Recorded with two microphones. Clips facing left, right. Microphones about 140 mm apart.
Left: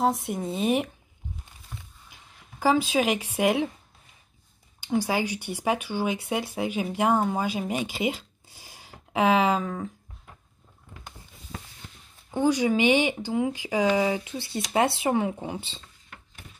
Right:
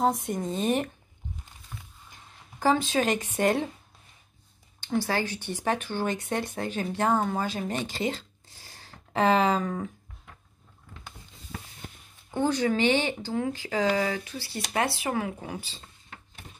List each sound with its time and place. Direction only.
0.0 s speech: centre (ahead or behind)
2.6 s speech: 10° left (ahead or behind)
4.7 s speech: 10° left (ahead or behind)
11.8 s a sound: 50° right (ahead or behind)
12.3 s speech: 10° left (ahead or behind)